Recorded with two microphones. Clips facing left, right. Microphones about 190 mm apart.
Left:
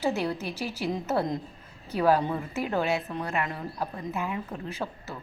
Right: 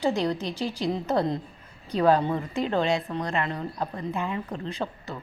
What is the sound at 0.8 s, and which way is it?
A woman's voice, 10° left (ahead or behind).